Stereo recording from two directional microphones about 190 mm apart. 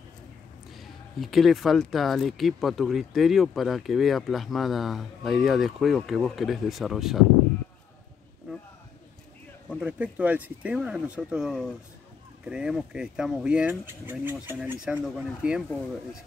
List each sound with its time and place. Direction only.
0.7 s speech: centre (ahead or behind)
9.8 s speech: 5° right (ahead or behind)